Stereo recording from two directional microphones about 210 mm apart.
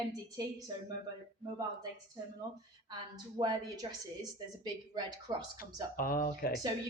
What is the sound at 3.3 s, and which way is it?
A woman's voice, 20° right (ahead or behind).